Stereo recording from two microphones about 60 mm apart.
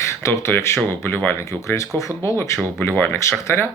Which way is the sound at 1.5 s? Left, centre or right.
Left.